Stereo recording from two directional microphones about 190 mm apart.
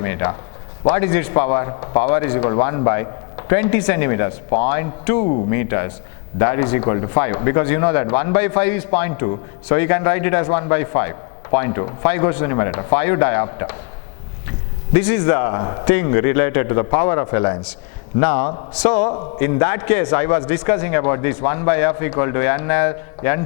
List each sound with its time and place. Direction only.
0.0 s speech: 15° left (ahead or behind)
14.9 s a man's voice: 10° left (ahead or behind)